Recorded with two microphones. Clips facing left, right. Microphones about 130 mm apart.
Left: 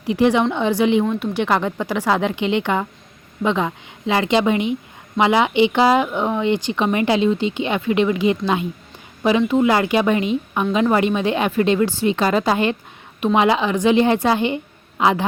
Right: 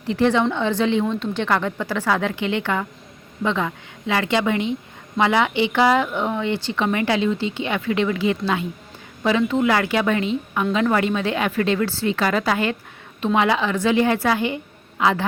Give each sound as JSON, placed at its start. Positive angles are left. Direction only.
{"t": 0.0, "sound": "speech", "side_deg": 15}